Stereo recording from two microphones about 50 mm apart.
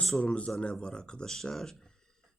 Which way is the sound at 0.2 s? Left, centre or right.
Left.